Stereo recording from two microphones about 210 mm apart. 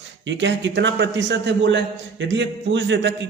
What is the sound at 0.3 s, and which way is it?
A man's voice, 60° right (ahead or behind).